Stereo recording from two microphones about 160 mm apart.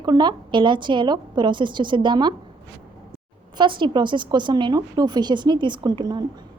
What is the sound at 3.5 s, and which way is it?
A woman's voice, 30° right (ahead or behind).